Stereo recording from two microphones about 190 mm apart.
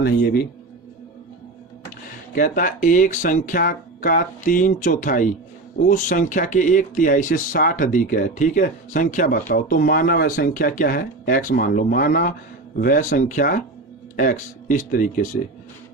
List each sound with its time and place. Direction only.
0.0 s a man's voice: 60° left (ahead or behind)
2.3 s speech: 45° left (ahead or behind)